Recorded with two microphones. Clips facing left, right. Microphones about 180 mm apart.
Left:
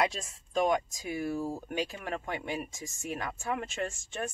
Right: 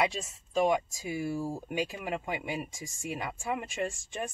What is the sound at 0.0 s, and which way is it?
Speech, 5° right (ahead or behind).